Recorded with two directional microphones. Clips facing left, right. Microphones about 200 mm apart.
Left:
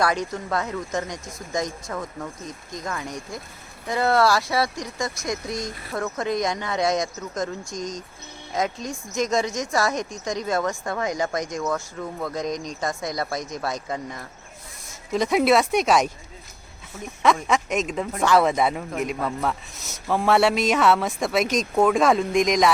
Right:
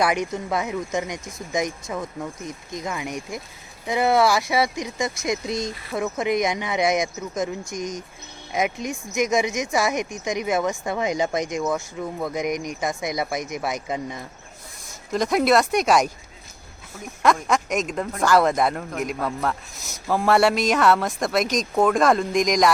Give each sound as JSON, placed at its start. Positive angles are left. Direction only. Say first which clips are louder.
{"t": 0.0, "sound": "speech", "louder": "right 1 dB", "side_deg": -15}
{"t": 7.8, "sound": "speech", "louder": "right 1 dB", "side_deg": 15}
{"t": 8.5, "sound": "speech", "louder": "right 2 dB", "side_deg": -20}
{"t": 11.6, "sound": "speech", "louder": "right 2 dB", "side_deg": -15}
{"t": 15.1, "sound": "speech", "louder": "even", "side_deg": 5}